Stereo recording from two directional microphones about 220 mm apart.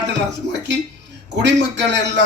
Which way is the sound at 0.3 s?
50° right (ahead or behind).